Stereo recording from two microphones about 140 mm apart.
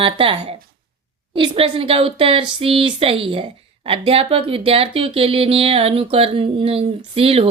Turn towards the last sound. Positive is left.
turn(degrees=-45)  # may be behind; listen again after turning